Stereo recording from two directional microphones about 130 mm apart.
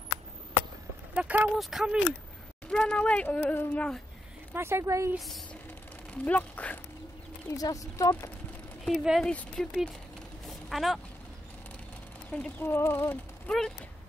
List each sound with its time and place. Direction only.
1.1 s a sound: 10° right (ahead or behind)
1.6 s speech: centre (ahead or behind)
4.6 s speech: 20° right (ahead or behind)
5.1 s speech: centre (ahead or behind)
6.2 s speech: 10° left (ahead or behind)
7.4 s speech: 25° left (ahead or behind)
8.8 s speech: centre (ahead or behind)
10.4 s mechanisms: centre (ahead or behind)
12.3 s speech: 10° left (ahead or behind)
13.5 s speech: 5° left (ahead or behind)